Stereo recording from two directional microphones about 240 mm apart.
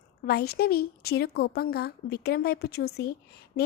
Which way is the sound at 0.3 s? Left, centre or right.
Left.